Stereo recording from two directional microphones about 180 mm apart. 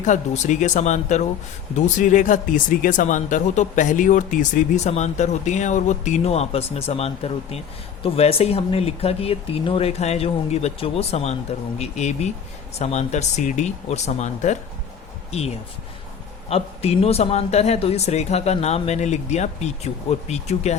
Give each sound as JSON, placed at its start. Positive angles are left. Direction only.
{"t": 0.0, "sound": "speech", "side_deg": 40}